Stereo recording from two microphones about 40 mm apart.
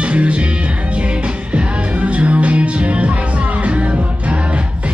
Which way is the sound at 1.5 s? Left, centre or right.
Right.